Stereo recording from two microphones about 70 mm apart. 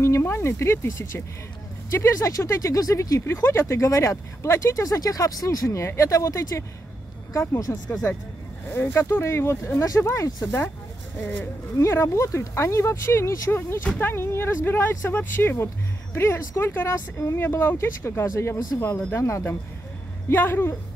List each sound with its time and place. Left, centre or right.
0.0 s speech: left
3.2 s speech: left
8.7 s speech: left
11.1 s speech: left
11.8 s speech: left
13.5 s speech: left